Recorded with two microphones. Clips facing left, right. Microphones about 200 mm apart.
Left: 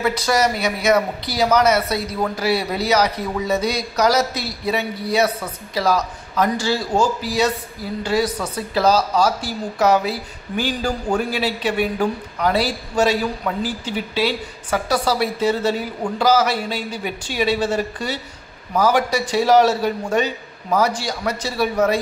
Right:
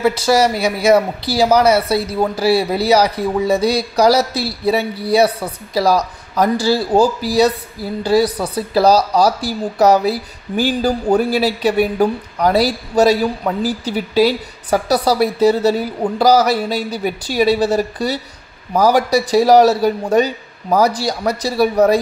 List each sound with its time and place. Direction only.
0.0 s speech: 30° right (ahead or behind)